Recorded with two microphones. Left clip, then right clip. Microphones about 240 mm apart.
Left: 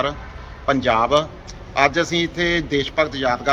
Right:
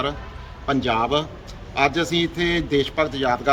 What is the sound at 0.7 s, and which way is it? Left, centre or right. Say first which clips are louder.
A man's voice: left 4 dB; centre.